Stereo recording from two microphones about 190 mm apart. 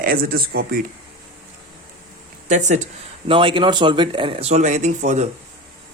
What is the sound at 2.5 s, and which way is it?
Speech, 40° right (ahead or behind).